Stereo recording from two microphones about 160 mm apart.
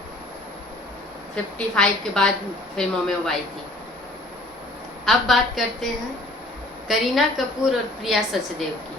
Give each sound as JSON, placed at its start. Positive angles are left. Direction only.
{"t": 1.5, "sound": "a woman's voice", "side_deg": 5}
{"t": 5.0, "sound": "a woman's voice", "side_deg": 0}